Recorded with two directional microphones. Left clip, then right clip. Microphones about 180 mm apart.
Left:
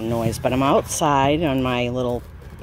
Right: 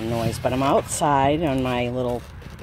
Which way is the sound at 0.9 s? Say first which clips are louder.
Left 1 dB; 10° left (ahead or behind).